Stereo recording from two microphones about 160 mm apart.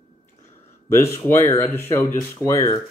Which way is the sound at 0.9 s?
15° left (ahead or behind).